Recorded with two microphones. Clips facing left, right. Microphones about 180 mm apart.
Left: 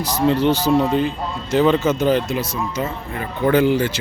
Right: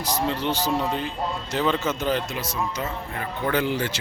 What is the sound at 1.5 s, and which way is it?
Speech, 15° left (ahead or behind).